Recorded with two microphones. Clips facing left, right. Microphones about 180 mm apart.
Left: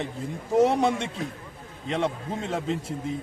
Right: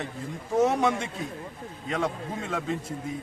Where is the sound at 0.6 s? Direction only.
30° left (ahead or behind).